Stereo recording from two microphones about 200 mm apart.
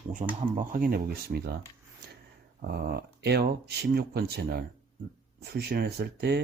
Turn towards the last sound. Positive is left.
turn(degrees=-55)  # may be behind; listen again after turning